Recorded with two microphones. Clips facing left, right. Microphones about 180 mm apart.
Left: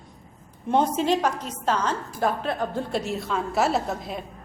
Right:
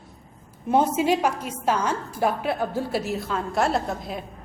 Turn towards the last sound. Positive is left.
turn(degrees=0)  # may be behind; listen again after turning